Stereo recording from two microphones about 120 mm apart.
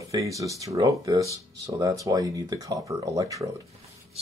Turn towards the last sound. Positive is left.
turn(degrees=-30)  # may be behind; listen again after turning